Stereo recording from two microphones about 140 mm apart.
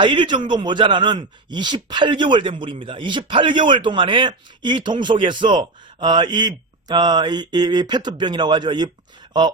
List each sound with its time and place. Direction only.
0.0 s a man's voice: 35° right (ahead or behind)